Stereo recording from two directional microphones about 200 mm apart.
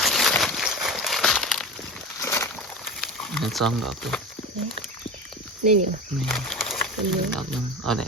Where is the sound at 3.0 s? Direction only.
Centre (ahead or behind).